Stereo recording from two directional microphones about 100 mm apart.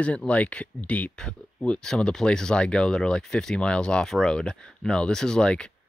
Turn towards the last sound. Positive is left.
turn(degrees=10)  # may be behind; listen again after turning